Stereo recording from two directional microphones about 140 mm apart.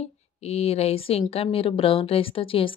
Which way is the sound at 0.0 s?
50° left (ahead or behind).